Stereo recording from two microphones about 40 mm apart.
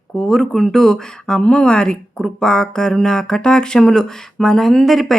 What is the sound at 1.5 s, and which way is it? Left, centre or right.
Speech, left.